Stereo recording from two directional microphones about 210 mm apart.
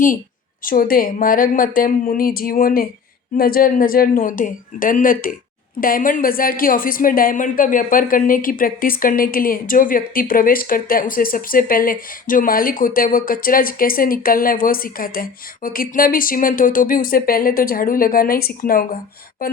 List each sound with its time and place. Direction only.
0.6 s a woman's voice: 40° left (ahead or behind)